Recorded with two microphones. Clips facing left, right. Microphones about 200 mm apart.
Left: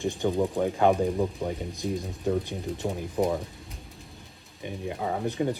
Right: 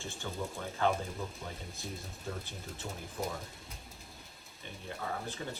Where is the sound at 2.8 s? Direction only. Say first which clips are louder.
Left 12 dB; 55° left (ahead or behind).